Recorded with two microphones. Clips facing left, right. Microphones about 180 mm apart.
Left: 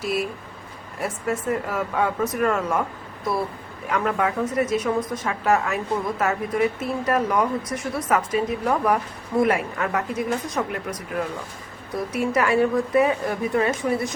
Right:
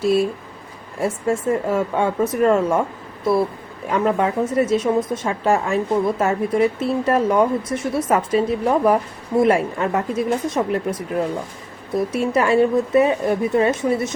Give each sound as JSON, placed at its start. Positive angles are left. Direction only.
{"t": 0.0, "sound": "speech", "side_deg": -30}
{"t": 3.8, "sound": "speech", "side_deg": -30}